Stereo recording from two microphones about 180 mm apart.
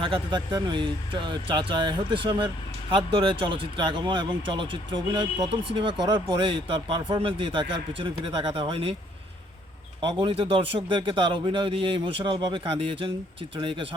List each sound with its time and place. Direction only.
0.0 s a man's voice: 25° right (ahead or behind)
10.0 s a man's voice: 30° right (ahead or behind)